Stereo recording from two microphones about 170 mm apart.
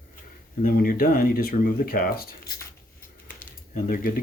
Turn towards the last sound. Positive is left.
turn(degrees=55)  # may be behind; listen again after turning